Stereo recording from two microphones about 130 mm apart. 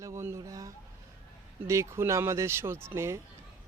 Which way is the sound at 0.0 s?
20° right (ahead or behind).